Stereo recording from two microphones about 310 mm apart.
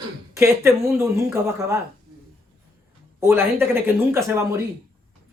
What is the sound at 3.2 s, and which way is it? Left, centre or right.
Speech, centre.